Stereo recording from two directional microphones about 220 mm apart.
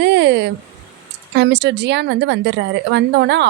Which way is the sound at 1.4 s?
50° right (ahead or behind).